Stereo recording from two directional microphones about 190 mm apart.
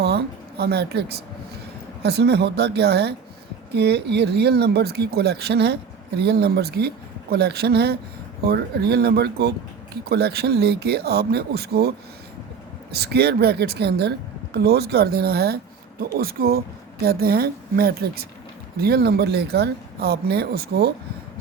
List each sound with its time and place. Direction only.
0.0 s a woman's voice: 60° right (ahead or behind)